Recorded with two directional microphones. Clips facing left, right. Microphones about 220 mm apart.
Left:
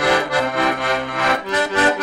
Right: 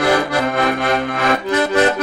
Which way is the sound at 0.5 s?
55° right (ahead or behind).